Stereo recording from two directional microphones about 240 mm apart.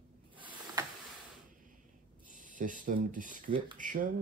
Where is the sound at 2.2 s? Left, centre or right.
Right.